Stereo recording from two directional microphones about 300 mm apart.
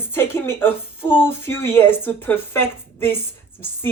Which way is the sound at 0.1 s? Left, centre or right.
Centre.